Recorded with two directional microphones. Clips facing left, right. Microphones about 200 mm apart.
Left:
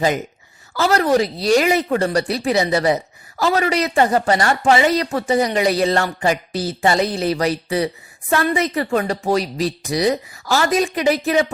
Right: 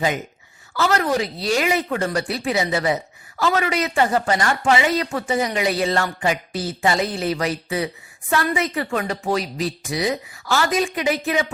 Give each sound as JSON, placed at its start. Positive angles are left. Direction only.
{"t": 0.7, "sound": "speech", "side_deg": 35}